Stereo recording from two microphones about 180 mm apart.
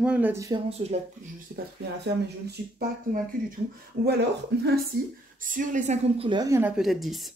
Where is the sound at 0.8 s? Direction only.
30° right (ahead or behind).